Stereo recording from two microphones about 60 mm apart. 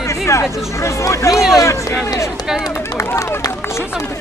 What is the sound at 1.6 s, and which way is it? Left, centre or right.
Speech, left.